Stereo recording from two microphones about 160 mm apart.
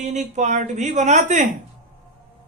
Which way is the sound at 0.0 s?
50° right (ahead or behind).